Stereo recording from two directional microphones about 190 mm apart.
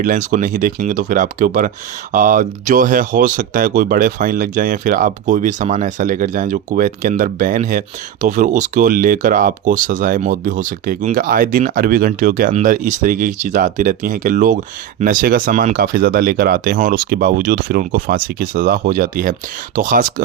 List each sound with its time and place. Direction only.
0.0 s speech: 45° right (ahead or behind)